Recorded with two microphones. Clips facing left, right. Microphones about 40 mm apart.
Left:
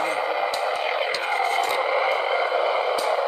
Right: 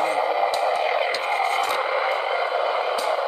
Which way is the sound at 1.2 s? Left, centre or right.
Centre.